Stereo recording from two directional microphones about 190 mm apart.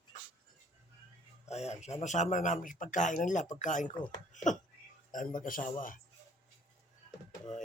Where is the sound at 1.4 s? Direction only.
35° left (ahead or behind).